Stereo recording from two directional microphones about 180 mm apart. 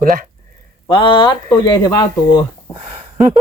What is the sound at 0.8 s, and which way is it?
Speech, 25° left (ahead or behind).